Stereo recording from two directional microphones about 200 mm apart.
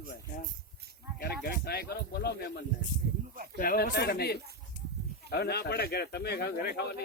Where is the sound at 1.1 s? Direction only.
50° left (ahead or behind).